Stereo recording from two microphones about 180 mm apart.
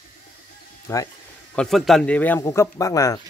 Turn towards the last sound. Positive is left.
turn(degrees=20)  # may be behind; listen again after turning